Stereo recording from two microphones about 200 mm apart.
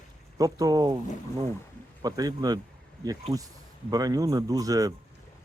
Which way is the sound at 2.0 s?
20° right (ahead or behind).